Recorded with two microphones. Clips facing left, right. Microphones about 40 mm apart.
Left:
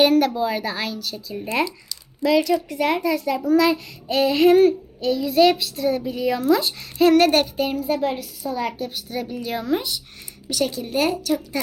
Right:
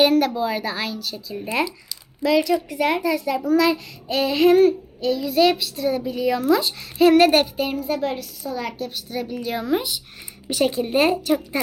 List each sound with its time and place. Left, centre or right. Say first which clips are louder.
0.0 s a child's voice: left 1 dB; centre
10.5 s a woman's voice: right 3 dB; right